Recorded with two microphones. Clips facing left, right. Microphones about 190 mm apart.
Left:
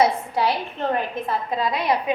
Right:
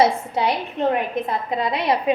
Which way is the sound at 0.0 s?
20° right (ahead or behind).